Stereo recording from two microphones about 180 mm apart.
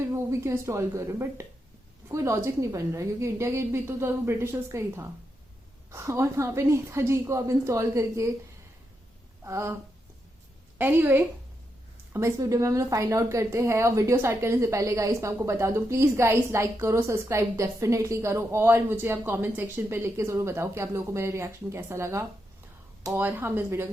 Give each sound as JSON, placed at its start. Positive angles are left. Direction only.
{"t": 0.0, "sound": "a woman's voice", "side_deg": -15}
{"t": 9.4, "sound": "speech", "side_deg": -15}
{"t": 10.8, "sound": "a woman's voice", "side_deg": -10}